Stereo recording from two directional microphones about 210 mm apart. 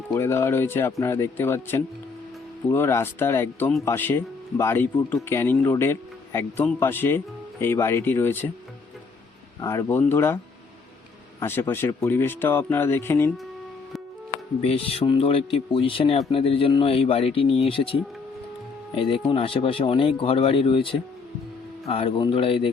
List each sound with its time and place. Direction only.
0.1 s speech: 10° left (ahead or behind)
9.6 s speech: 15° left (ahead or behind)
11.3 s speech: 10° left (ahead or behind)
14.6 s speech: 30° left (ahead or behind)